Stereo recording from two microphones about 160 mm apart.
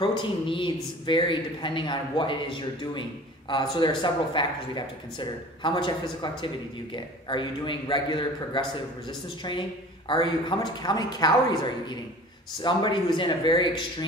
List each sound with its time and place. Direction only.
0.0 s a man's voice: 30° left (ahead or behind)